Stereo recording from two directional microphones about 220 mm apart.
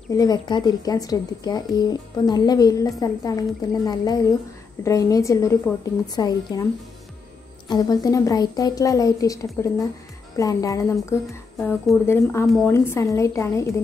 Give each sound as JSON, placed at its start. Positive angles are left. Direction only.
{"t": 0.1, "sound": "speech", "side_deg": 15}
{"t": 12.4, "sound": "a woman's voice", "side_deg": 0}
{"t": 12.7, "sound": "speech", "side_deg": 10}